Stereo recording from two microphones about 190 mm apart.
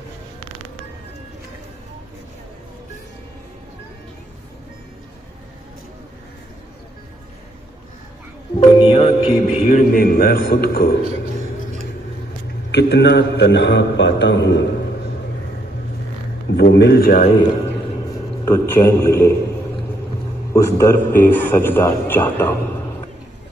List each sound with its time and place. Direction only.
8.5 s a man's voice: 30° left (ahead or behind); by 11.0 s 55° left (ahead or behind)
12.7 s a man's voice: 65° left (ahead or behind)
16.5 s a man's voice: 60° left (ahead or behind)
18.4 s a man's voice: 15° left (ahead or behind)
20.5 s a man's voice: 15° left (ahead or behind)